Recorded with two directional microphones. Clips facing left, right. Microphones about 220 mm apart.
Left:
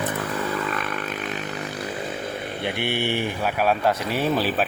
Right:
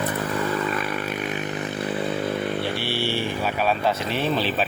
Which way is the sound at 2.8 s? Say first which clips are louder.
Left 1 dB; 20° left (ahead or behind).